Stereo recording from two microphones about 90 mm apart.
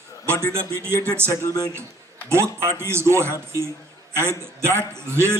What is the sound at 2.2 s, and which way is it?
Speech, 30° right (ahead or behind).